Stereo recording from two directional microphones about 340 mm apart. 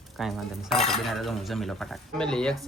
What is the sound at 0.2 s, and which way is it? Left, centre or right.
Cutlery, centre.